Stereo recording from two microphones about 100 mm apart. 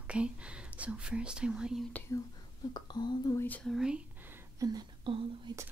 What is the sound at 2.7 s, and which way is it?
Speech, 45° left (ahead or behind).